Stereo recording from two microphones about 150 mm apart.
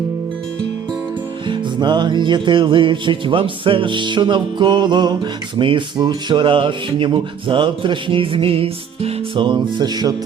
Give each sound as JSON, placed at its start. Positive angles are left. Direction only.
{"t": 1.5, "sound": "music", "side_deg": -30}